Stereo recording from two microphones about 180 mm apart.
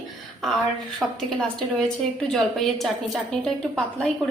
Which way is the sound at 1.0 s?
Centre (ahead or behind).